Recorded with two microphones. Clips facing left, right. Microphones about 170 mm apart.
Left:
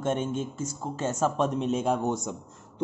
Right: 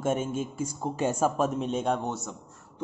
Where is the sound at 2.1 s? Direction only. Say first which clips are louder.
Left 5 dB; 15° left (ahead or behind).